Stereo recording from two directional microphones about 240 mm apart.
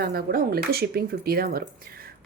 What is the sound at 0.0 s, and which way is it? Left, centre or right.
Speech, right.